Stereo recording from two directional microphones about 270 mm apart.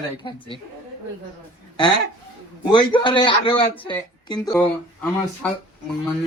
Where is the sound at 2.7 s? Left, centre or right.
Centre.